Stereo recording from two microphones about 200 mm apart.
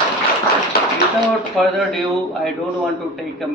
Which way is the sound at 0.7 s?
50° left (ahead or behind).